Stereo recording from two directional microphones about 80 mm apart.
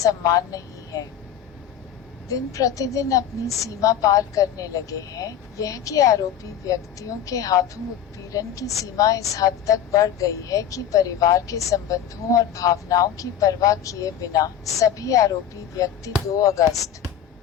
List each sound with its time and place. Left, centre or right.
0.0 s a woman's voice: left
2.3 s a woman's voice: left